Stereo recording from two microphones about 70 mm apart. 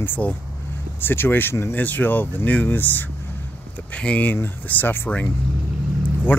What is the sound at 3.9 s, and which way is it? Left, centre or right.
Speech, centre.